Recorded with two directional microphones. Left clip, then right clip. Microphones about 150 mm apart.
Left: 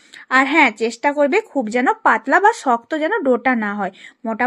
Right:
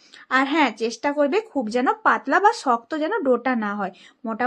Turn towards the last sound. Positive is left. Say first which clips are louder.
# left 5 dB
turn(degrees=20)  # may be behind; listen again after turning